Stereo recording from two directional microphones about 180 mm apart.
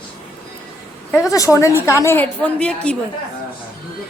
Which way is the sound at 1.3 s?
20° left (ahead or behind).